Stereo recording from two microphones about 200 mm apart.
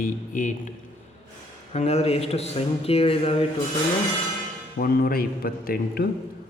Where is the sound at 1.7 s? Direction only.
30° left (ahead or behind).